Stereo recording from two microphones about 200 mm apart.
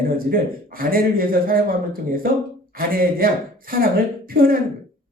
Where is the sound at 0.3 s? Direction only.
45° right (ahead or behind).